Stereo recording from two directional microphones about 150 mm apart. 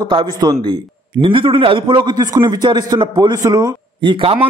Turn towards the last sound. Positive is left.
turn(degrees=-35)  # may be behind; listen again after turning